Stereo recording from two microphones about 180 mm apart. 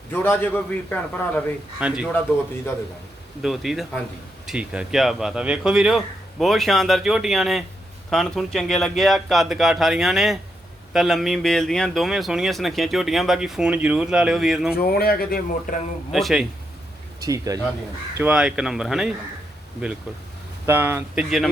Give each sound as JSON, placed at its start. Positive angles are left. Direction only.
{"t": 0.1, "sound": "a man's voice", "side_deg": 10}
{"t": 1.8, "sound": "speech", "side_deg": -5}
{"t": 3.4, "sound": "speech", "side_deg": 0}
{"t": 14.8, "sound": "speech", "side_deg": 55}
{"t": 16.1, "sound": "speech", "side_deg": 0}
{"t": 17.2, "sound": "speech", "side_deg": -20}
{"t": 18.2, "sound": "speech", "side_deg": -5}
{"t": 20.7, "sound": "speech", "side_deg": -10}